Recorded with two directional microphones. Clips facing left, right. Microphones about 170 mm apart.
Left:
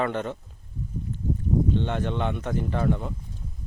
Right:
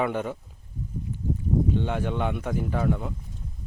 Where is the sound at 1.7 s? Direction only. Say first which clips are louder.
Even; 10° right (ahead or behind).